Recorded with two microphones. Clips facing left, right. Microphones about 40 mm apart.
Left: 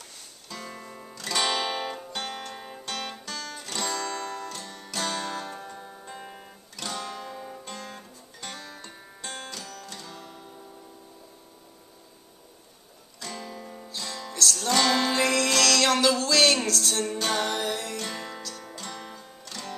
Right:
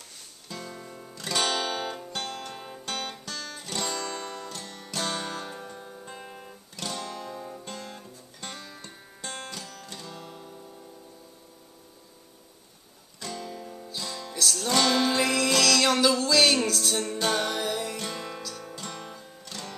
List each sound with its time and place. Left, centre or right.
0.7 s music: left
1.5 s music: centre
2.8 s music: centre
5.7 s guitar: centre
7.9 s music: centre
9.5 s music: centre
13.5 s guitar: left
13.8 s music: centre